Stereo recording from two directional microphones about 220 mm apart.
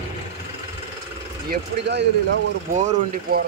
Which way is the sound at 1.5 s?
50° right (ahead or behind).